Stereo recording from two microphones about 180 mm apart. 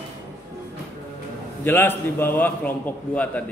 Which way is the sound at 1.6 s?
10° left (ahead or behind).